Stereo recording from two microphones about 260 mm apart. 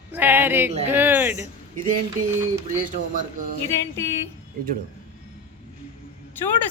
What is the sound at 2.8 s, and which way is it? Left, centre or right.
Speech, right.